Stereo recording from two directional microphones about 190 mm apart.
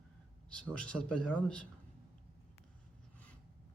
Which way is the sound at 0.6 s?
5° left (ahead or behind).